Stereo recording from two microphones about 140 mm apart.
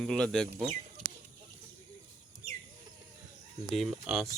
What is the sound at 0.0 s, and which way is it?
Speech, 5° left (ahead or behind).